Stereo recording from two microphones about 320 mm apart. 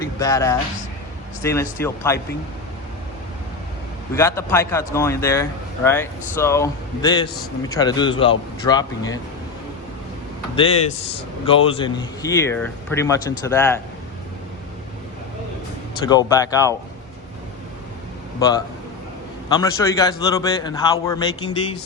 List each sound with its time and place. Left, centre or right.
0.0 s a man's voice: centre
4.1 s a man's voice: centre
10.5 s a man's voice: centre
16.0 s a man's voice: centre
18.3 s a man's voice: centre